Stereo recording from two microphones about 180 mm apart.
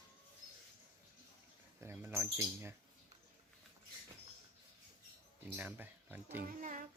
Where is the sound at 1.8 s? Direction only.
15° right (ahead or behind).